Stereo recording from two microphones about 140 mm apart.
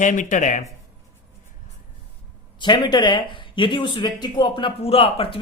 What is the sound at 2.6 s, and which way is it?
Speech, 30° left (ahead or behind).